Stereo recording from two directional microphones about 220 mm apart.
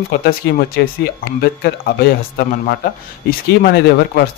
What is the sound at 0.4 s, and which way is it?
A man's voice, 50° left (ahead or behind).